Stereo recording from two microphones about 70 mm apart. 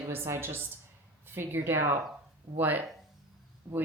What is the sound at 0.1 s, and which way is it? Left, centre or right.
Speech, right.